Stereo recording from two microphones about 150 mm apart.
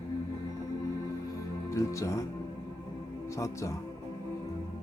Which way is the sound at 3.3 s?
20° left (ahead or behind).